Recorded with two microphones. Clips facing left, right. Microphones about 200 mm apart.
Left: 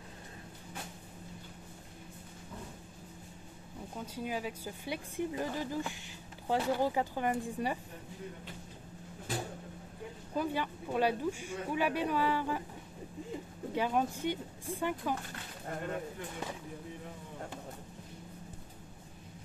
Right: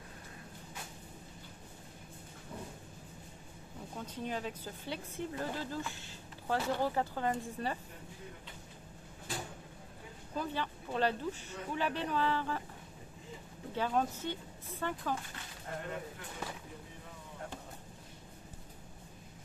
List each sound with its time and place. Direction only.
3.9 s a woman's voice: 10° left (ahead or behind)
10.3 s a woman's voice: 10° left (ahead or behind)
13.7 s a woman's voice: 15° left (ahead or behind)